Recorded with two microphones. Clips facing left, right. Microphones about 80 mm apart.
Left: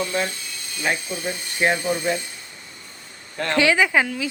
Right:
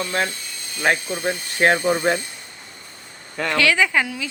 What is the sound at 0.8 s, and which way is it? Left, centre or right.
Speech, right.